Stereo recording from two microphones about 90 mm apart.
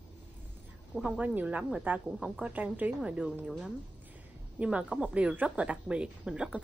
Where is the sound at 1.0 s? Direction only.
15° right (ahead or behind).